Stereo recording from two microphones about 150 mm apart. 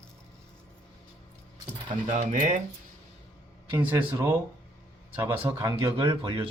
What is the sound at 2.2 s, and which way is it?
Speech, 55° right (ahead or behind).